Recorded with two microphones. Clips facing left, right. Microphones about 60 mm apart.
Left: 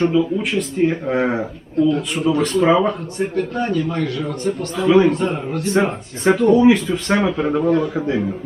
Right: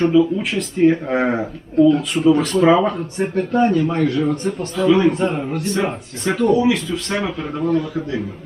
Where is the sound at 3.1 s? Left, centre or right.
Right.